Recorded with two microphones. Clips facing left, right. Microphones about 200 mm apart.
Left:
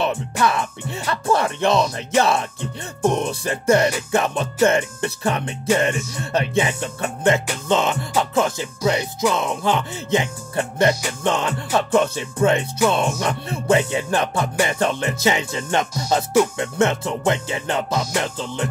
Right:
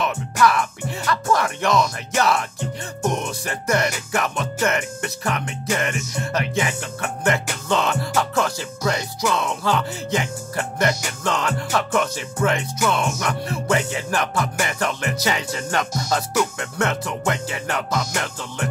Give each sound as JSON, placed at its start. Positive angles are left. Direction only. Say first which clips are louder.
{"t": 0.0, "sound": "music", "louder": "right 1 dB", "side_deg": 25}